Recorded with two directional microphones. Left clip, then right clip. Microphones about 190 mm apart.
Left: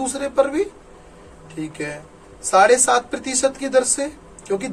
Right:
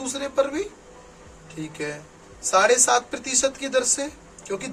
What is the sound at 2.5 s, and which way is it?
A man's voice, 5° left (ahead or behind).